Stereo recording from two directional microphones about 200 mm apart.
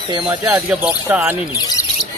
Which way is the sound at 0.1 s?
20° right (ahead or behind).